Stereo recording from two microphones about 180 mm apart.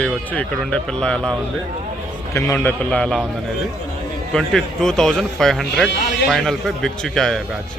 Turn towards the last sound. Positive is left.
turn(degrees=0)  # may be behind; listen again after turning